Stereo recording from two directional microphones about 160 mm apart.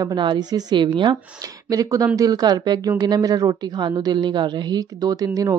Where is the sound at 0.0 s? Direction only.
30° right (ahead or behind).